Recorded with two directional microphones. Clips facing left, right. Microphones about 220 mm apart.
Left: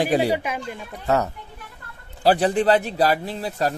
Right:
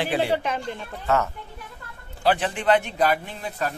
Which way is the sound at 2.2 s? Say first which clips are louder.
Left 5 dB; 35° left (ahead or behind).